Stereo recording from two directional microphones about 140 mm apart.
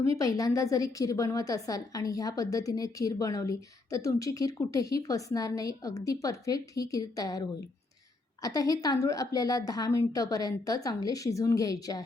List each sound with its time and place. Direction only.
0.2 s a woman's voice: 25° left (ahead or behind)